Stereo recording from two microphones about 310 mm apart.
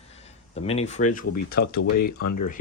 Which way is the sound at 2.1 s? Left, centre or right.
Left.